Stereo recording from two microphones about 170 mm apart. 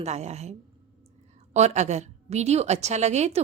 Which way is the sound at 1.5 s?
40° right (ahead or behind).